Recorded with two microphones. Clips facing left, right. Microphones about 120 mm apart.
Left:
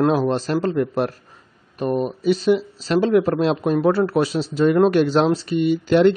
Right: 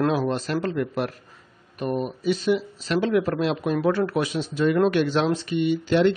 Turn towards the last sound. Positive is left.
turn(degrees=45)  # may be behind; listen again after turning